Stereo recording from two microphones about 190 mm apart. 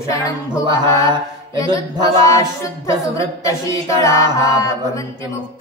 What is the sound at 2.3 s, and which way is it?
A capella, 15° left (ahead or behind).